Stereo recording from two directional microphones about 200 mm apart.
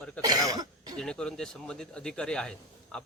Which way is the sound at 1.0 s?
5° left (ahead or behind).